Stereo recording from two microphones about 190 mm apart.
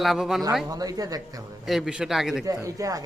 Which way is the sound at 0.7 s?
20° right (ahead or behind).